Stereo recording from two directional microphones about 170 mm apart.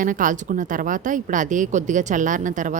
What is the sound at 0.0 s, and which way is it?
A woman's voice, 50° right (ahead or behind).